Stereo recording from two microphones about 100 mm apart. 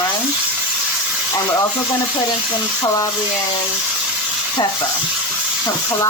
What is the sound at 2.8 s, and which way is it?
Speech, 35° left (ahead or behind).